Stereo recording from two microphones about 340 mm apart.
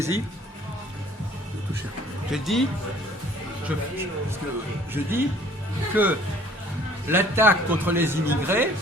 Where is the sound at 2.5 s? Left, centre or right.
Centre.